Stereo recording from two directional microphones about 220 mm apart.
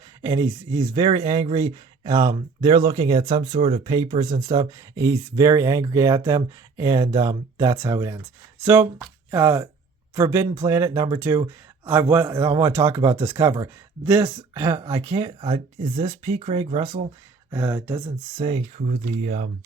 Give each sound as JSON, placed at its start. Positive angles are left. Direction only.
{"t": 0.2, "sound": "speech", "side_deg": -15}
{"t": 17.5, "sound": "speech", "side_deg": -10}
{"t": 18.0, "sound": "speech", "side_deg": -25}
{"t": 18.9, "sound": "speech", "side_deg": -40}